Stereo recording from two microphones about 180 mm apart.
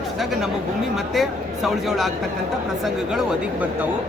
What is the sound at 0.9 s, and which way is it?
Speech, centre (ahead or behind).